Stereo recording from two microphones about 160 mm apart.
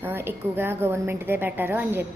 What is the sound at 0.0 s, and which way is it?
A woman's voice, 15° right (ahead or behind).